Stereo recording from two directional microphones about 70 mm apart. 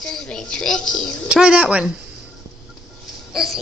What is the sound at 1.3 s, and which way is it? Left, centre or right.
Speech, centre.